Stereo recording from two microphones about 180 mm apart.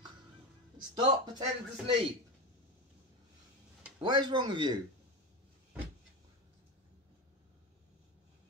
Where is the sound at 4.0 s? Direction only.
25° right (ahead or behind).